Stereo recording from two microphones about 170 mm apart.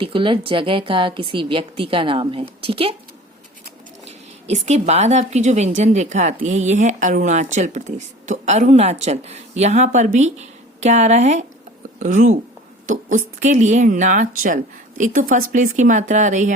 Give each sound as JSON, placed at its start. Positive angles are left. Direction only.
{"t": 0.0, "sound": "a woman's voice", "side_deg": -30}
{"t": 4.0, "sound": "a woman's voice", "side_deg": -40}